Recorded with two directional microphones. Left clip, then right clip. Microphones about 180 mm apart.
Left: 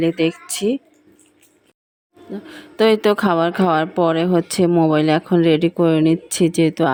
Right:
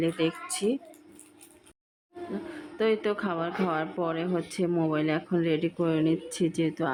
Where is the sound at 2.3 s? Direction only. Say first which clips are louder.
Left 6 dB; 40° left (ahead or behind).